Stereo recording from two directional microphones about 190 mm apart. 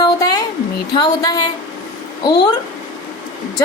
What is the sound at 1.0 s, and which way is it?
Speech, 20° left (ahead or behind).